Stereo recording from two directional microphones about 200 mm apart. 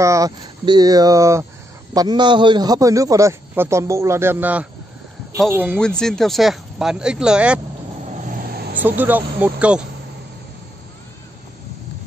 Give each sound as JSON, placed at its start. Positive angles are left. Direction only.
{"t": 0.0, "sound": "a man's voice", "side_deg": -15}
{"t": 5.8, "sound": "speech", "side_deg": 5}
{"t": 8.1, "sound": "vehicle", "side_deg": -40}
{"t": 8.8, "sound": "a man's voice", "side_deg": -10}